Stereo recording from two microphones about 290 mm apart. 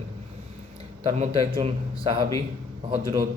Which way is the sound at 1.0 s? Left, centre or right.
Centre.